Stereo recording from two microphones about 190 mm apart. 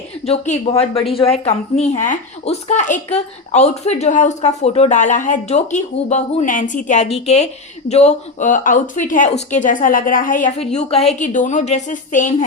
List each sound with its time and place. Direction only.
0.3 s a woman's voice: 30° left (ahead or behind)
10.7 s a woman's voice: 35° left (ahead or behind)